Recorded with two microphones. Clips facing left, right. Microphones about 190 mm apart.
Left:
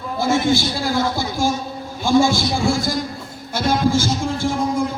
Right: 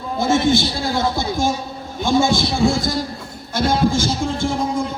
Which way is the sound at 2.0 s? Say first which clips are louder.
Left 1 dB; 20° right (ahead or behind).